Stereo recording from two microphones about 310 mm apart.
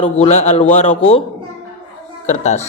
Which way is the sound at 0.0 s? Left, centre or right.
Centre.